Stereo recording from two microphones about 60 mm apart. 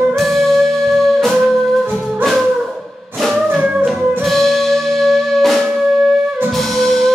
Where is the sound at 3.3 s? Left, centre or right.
Right.